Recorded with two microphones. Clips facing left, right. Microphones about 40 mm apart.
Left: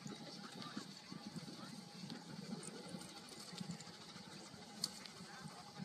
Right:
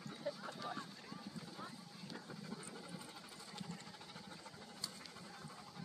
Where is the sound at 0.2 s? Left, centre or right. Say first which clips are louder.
Right 7 dB; right.